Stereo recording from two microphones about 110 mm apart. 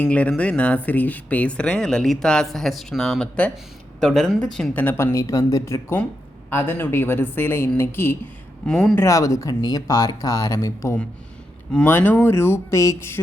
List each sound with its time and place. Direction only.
0.0 s speech: 10° left (ahead or behind)
5.1 s speech: 30° left (ahead or behind)
8.6 s speech: 5° left (ahead or behind)
9.0 s speech: 30° left (ahead or behind)